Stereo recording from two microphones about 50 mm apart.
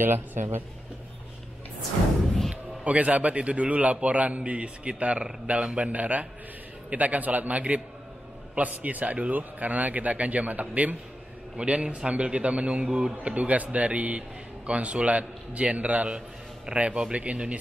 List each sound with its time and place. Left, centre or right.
0.0 s a man's voice: right
2.2 s music: centre
2.8 s a man's voice: right